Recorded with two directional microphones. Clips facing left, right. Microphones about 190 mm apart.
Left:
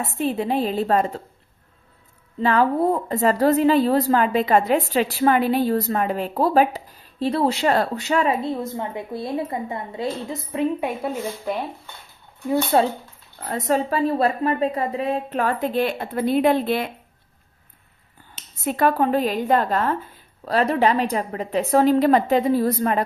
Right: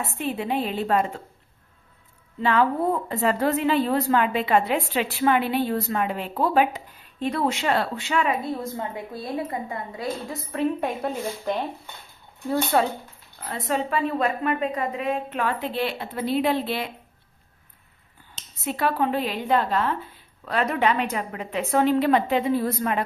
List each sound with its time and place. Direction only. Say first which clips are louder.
0.0 s a woman's voice: left 5 dB; 40° left (ahead or behind)
2.4 s a woman's voice: left 3 dB; 40° left (ahead or behind)
8.4 s a woman's voice: left 3 dB; 25° left (ahead or behind)
11.0 s speech: left 1 dB; 5° left (ahead or behind)
12.7 s a woman's voice: left 3 dB; 25° left (ahead or behind)
13.5 s a woman's voice: left 4 dB; 40° left (ahead or behind)
18.6 s a woman's voice: left 4 dB; 50° left (ahead or behind)